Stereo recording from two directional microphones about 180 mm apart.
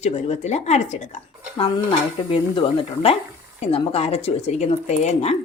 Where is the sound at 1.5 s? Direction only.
30° left (ahead or behind).